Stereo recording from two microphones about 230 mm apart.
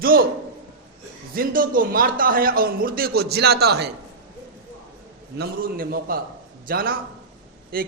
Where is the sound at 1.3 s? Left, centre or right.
Right.